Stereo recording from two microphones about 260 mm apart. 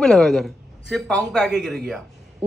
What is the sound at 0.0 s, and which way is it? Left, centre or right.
A man's voice, centre.